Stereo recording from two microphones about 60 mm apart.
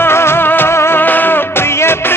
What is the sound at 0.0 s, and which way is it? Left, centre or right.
Music, left.